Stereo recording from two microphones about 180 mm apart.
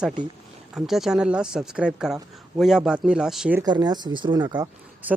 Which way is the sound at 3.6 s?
25° right (ahead or behind).